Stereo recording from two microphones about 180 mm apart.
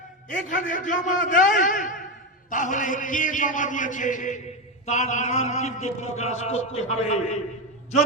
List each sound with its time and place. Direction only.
0.4 s a man's voice: 45° left (ahead or behind)